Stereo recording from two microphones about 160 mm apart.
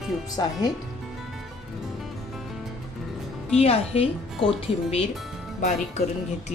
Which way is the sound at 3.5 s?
40° left (ahead or behind).